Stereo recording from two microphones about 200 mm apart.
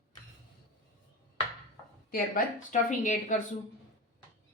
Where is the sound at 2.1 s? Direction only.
40° left (ahead or behind).